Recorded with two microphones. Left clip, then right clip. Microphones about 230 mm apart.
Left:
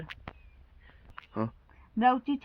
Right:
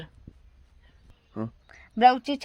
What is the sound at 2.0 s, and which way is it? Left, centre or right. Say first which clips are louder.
Speech: right 6 dB; right.